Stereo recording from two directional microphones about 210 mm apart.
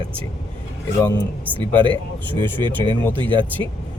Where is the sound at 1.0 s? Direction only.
15° left (ahead or behind).